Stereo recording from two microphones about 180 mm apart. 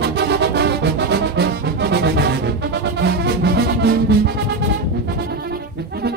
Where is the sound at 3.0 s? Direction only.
65° right (ahead or behind).